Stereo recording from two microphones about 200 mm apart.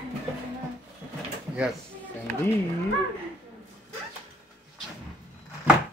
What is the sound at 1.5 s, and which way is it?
Speech, 5° right (ahead or behind).